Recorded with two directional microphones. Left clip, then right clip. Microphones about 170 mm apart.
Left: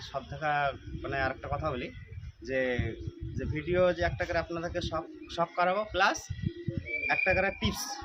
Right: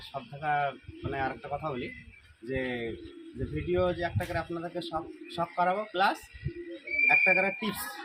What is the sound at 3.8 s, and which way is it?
A man's voice, 5° left (ahead or behind).